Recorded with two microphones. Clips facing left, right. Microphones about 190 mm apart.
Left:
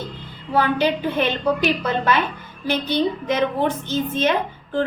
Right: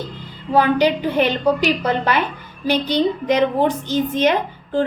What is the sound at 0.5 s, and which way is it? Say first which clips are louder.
Speech: right 4 dB; 15° right (ahead or behind).